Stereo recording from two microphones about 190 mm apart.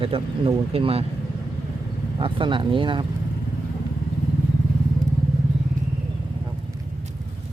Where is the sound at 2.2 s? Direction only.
25° right (ahead or behind).